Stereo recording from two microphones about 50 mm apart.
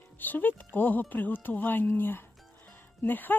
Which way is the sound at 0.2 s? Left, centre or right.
Left.